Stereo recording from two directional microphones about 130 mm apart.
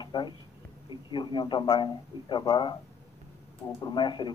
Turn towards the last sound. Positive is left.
turn(degrees=35)  # may be behind; listen again after turning